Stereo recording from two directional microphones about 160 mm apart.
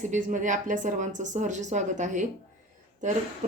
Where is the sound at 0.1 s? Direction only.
50° right (ahead or behind).